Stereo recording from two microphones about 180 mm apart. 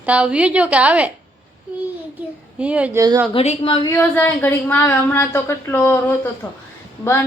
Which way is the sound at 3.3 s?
35° left (ahead or behind).